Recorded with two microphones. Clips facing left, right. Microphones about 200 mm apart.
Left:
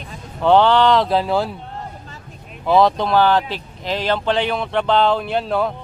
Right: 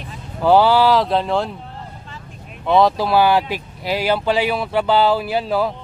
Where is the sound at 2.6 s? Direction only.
Centre (ahead or behind).